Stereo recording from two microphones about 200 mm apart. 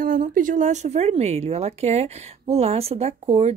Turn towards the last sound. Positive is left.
turn(degrees=-30)  # may be behind; listen again after turning